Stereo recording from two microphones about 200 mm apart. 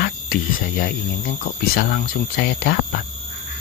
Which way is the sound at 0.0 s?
45° left (ahead or behind).